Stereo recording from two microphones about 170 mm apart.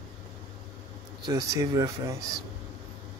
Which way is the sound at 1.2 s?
20° right (ahead or behind).